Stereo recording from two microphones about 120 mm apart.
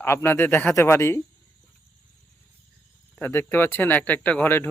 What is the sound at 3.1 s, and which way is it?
Speech, 15° left (ahead or behind).